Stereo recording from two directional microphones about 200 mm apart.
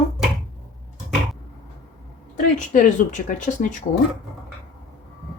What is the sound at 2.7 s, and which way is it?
Speech, 40° left (ahead or behind).